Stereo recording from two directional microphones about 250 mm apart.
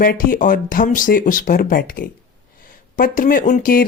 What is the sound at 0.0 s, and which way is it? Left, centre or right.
Speech, left.